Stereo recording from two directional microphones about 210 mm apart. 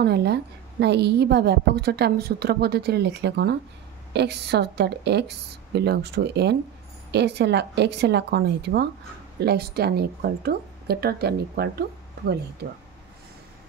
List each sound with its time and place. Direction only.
0.0 s a woman's voice: 50° right (ahead or behind)